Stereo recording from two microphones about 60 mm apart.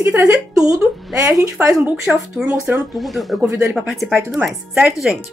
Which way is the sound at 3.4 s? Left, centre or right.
Right.